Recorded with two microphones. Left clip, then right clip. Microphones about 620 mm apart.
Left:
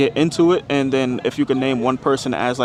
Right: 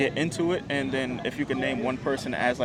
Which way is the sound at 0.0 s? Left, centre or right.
Left.